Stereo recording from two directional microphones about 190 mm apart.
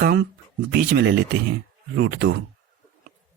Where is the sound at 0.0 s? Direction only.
55° right (ahead or behind).